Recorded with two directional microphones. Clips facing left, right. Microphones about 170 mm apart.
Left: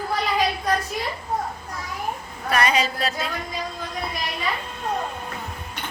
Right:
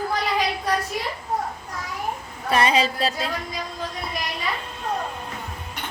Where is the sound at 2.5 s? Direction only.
30° right (ahead or behind).